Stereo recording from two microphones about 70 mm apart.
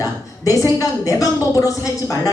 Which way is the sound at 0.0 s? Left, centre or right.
Left.